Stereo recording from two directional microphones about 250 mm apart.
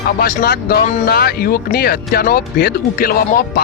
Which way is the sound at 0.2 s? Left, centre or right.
Left.